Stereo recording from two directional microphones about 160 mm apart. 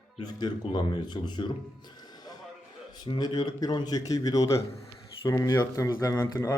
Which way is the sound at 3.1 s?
25° left (ahead or behind).